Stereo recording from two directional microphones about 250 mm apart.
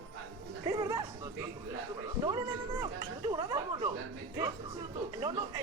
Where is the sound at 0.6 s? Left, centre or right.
Centre.